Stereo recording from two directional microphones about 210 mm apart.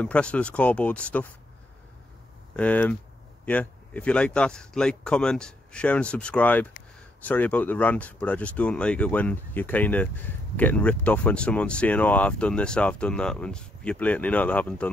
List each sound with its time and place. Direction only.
0.0 s speech: 5° left (ahead or behind)
2.5 s speech: 5° left (ahead or behind)